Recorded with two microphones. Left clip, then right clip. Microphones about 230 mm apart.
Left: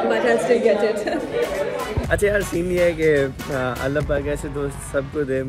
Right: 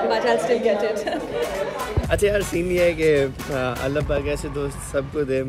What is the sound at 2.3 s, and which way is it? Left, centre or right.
Speech, centre.